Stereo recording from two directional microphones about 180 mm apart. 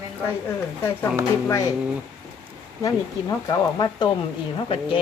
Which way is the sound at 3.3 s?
20° left (ahead or behind).